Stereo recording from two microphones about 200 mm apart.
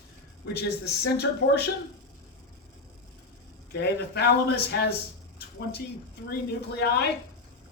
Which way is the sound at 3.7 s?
55° left (ahead or behind).